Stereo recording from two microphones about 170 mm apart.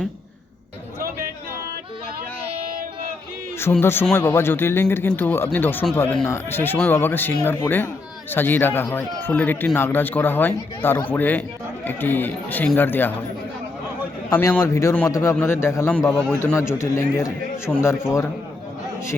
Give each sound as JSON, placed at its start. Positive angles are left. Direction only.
{"t": 3.6, "sound": "speech", "side_deg": 15}
{"t": 14.3, "sound": "speech", "side_deg": 15}